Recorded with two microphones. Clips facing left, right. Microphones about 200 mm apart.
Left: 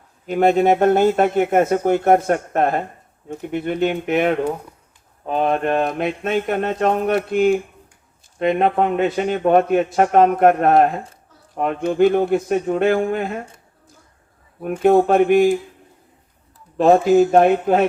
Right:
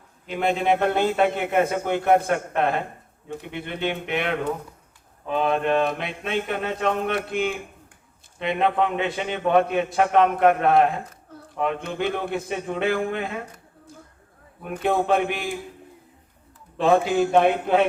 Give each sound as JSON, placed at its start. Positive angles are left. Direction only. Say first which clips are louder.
{"t": 0.3, "sound": "speech", "louder": "left 7 dB", "side_deg": 45}
{"t": 8.4, "sound": "speech", "louder": "left 5 dB", "side_deg": 45}
{"t": 14.8, "sound": "speech", "louder": "left 8 dB", "side_deg": 45}
{"t": 16.7, "sound": "speech", "louder": "left 7 dB", "side_deg": 45}